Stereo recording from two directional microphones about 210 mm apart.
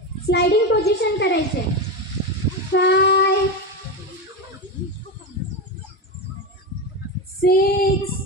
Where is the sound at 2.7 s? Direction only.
50° left (ahead or behind).